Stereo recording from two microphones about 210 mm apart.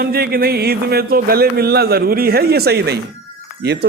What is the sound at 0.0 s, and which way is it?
Speech, 45° right (ahead or behind).